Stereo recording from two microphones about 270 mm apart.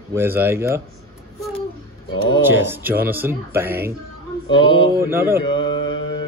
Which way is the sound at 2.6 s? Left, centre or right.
Centre.